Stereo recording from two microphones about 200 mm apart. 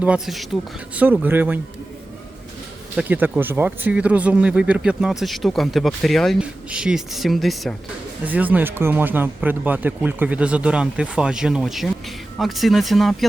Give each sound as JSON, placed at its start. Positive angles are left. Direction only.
{"t": 0.0, "sound": "speech", "side_deg": -5}
{"t": 2.9, "sound": "speech", "side_deg": -5}